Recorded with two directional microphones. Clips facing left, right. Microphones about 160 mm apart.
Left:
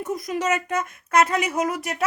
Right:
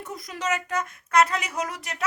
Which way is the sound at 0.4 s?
25° left (ahead or behind).